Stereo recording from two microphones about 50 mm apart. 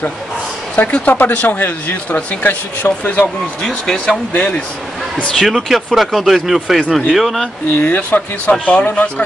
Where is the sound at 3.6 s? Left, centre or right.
Centre.